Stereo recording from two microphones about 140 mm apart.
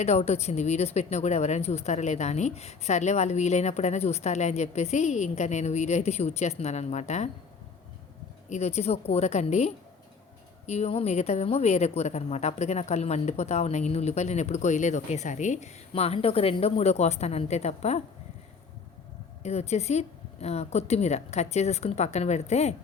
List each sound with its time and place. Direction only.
0.0 s a woman's voice: 50° left (ahead or behind)
8.4 s a woman's voice: 50° left (ahead or behind)
19.4 s a woman's voice: 50° left (ahead or behind)